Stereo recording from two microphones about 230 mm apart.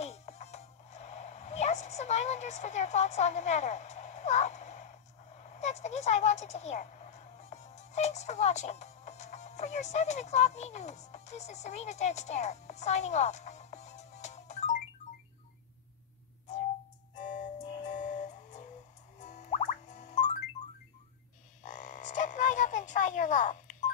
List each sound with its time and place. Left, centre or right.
0.0 s music: left
5.4 s speech: left
17.1 s music: left
21.6 s frog: left